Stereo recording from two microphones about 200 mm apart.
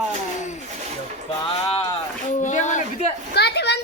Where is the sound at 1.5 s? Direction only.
25° left (ahead or behind).